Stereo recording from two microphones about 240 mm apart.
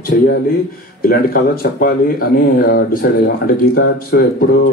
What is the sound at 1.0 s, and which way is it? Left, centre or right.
A man's voice, left.